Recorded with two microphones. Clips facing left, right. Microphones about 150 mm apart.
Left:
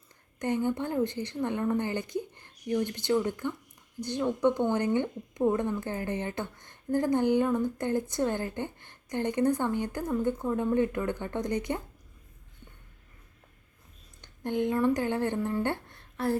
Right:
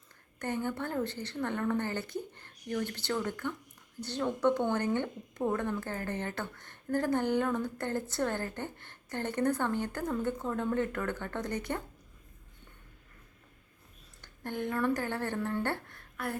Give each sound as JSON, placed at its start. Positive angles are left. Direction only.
{"t": 0.3, "sound": "speech", "side_deg": 15}
{"t": 14.2, "sound": "speech", "side_deg": 20}